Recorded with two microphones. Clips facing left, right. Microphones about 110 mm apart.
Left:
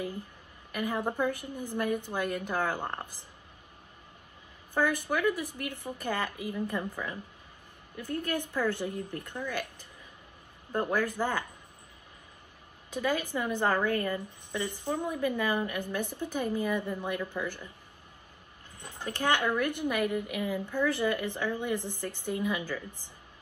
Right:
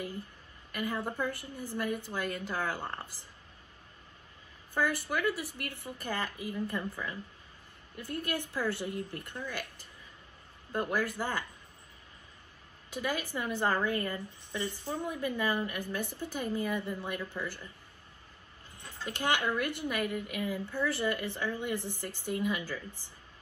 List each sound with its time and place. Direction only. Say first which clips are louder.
0.7 s a woman's voice: left 3 dB; 15° left (ahead or behind)
4.7 s a woman's voice: left 3 dB; 15° left (ahead or behind)
8.4 s a woman's voice: left 3 dB; 15° left (ahead or behind)
13.2 s a woman's voice: left 3 dB; 15° left (ahead or behind)
18.8 s a sound: left 2 dB; 15° left (ahead or behind)
19.0 s speech: left 3 dB; 15° right (ahead or behind)
19.8 s a woman's voice: left 4 dB; 15° left (ahead or behind)